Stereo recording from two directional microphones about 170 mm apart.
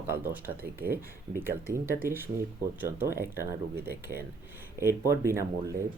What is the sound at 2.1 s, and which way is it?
Speech, 15° right (ahead or behind).